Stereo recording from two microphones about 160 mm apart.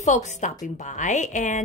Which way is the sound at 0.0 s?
45° left (ahead or behind).